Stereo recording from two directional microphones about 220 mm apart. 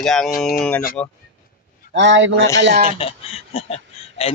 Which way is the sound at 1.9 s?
55° right (ahead or behind).